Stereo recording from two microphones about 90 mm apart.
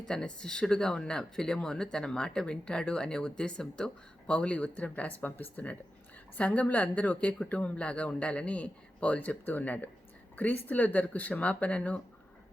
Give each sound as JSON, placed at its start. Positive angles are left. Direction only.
{"t": 0.1, "sound": "speech", "side_deg": 10}